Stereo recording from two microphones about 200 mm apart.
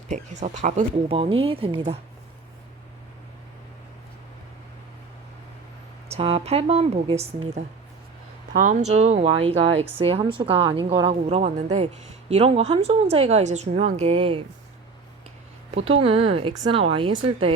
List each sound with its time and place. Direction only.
0.1 s speech: 35° right (ahead or behind)
6.1 s a woman's voice: 30° right (ahead or behind)
8.5 s a woman's voice: 40° right (ahead or behind)
15.7 s speech: 30° right (ahead or behind)